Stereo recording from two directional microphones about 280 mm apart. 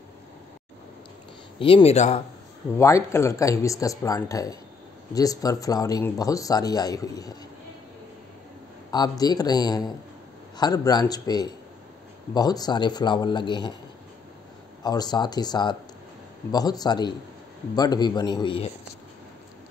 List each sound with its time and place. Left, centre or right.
1.6 s speech: centre
2.8 s speech: centre
8.9 s speech: centre
14.8 s speech: centre